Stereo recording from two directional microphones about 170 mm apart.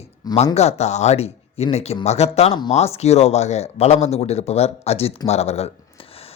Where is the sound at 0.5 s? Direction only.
40° left (ahead or behind).